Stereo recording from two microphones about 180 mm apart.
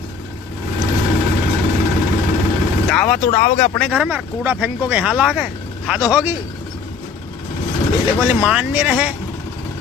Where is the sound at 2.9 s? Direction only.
5° left (ahead or behind).